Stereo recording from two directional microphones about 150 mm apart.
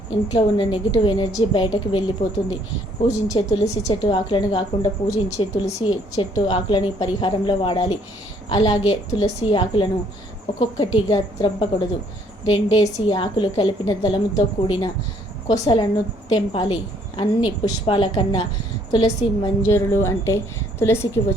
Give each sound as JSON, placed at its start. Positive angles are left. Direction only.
{"t": 0.3, "sound": "a woman's voice", "side_deg": 30}
{"t": 3.1, "sound": "a woman's voice", "side_deg": 30}
{"t": 10.9, "sound": "a woman's voice", "side_deg": 30}